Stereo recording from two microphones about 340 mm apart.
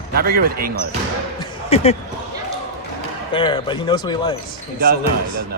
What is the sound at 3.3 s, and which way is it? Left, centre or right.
Speech, centre.